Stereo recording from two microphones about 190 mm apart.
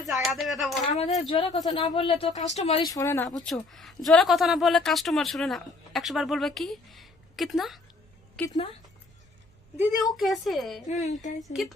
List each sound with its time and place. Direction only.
0.0 s speech: centre (ahead or behind)
0.9 s speech: 35° left (ahead or behind)
1.3 s speech: 25° left (ahead or behind)
2.9 s speech: 15° left (ahead or behind)
3.4 s speech: centre (ahead or behind)
8.4 s speech: 25° left (ahead or behind)
10.2 s speech: centre (ahead or behind)
10.8 s speech: 40° left (ahead or behind)
11.3 s speech: centre (ahead or behind)